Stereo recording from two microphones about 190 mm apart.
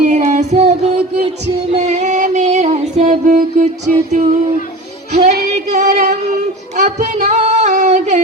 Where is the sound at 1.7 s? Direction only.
35° right (ahead or behind).